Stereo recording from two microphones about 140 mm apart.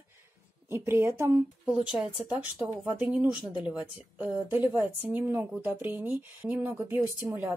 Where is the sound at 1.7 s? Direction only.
5° right (ahead or behind).